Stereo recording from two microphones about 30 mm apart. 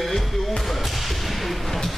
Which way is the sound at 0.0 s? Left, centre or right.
Centre.